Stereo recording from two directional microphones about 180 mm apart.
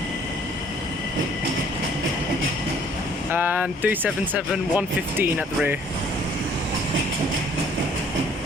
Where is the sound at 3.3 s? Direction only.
10° right (ahead or behind).